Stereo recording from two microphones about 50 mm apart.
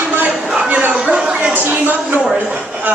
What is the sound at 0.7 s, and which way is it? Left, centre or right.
Speech, right.